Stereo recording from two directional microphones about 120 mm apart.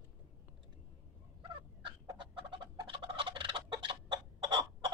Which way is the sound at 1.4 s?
45° right (ahead or behind).